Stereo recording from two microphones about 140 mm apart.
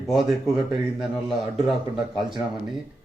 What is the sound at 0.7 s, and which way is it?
A man's voice, centre (ahead or behind).